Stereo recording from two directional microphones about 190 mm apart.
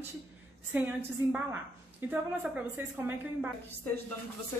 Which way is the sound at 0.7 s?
10° right (ahead or behind).